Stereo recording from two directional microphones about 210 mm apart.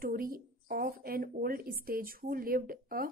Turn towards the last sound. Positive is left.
turn(degrees=-45)  # may be behind; listen again after turning